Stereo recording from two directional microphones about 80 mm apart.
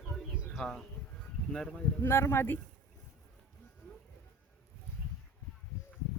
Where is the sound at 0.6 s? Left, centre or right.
Centre.